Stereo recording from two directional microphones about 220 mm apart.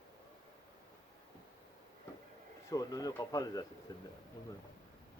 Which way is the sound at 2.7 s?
15° left (ahead or behind).